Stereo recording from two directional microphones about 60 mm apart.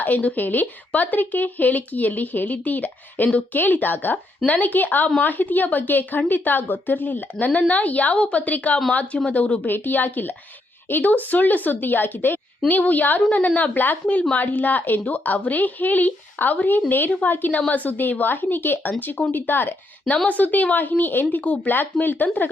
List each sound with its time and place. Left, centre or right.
0.0 s speech: left
21.8 s speech: left